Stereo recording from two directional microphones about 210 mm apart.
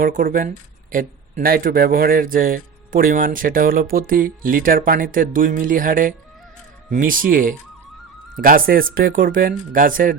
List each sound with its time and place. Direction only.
0.0 s speech: 40° right (ahead or behind)